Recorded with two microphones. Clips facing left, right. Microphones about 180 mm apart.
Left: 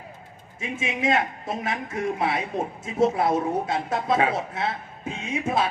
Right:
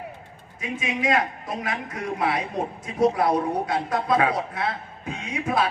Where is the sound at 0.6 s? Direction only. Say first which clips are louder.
Even; 25° left (ahead or behind).